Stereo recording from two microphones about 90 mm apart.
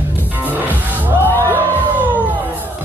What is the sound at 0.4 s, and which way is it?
Music, 20° right (ahead or behind).